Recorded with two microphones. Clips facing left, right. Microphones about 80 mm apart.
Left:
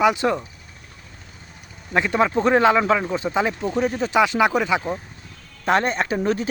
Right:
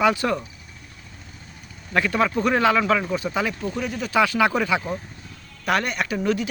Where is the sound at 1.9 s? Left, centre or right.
Left.